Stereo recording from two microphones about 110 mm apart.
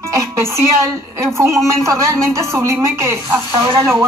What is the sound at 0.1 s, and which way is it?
A woman's voice, 25° right (ahead or behind).